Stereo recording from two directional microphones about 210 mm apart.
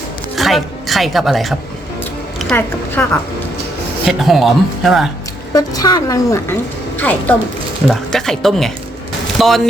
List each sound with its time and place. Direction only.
0.3 s a woman's voice: centre (ahead or behind)
5.5 s a woman's voice: 15° left (ahead or behind); by 9.5 s centre (ahead or behind)